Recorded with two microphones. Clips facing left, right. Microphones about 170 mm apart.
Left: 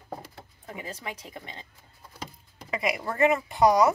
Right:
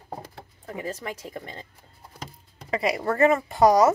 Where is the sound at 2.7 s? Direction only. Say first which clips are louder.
Right 5 dB; 35° right (ahead or behind).